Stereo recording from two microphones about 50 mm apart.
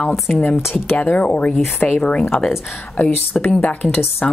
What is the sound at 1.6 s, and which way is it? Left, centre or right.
Speech, left.